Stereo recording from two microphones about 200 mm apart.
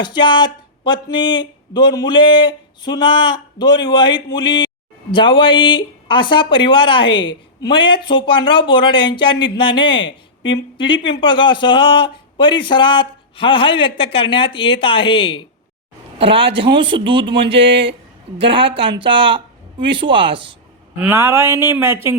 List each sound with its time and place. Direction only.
0.0 s speech: 25° left (ahead or behind)
16.1 s speech: 25° right (ahead or behind)
18.3 s speech: 25° right (ahead or behind)
21.0 s speech: 10° right (ahead or behind)